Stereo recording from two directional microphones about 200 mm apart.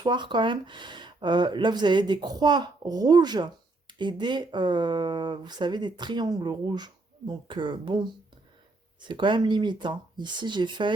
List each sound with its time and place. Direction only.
0.0 s speech: 20° right (ahead or behind)
9.0 s speech: 25° right (ahead or behind)